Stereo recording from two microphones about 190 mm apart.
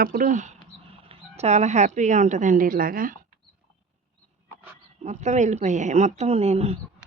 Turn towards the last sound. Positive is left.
turn(degrees=-35)  # may be behind; listen again after turning